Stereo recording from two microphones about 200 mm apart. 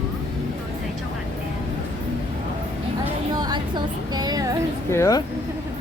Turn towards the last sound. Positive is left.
turn(degrees=15)  # may be behind; listen again after turning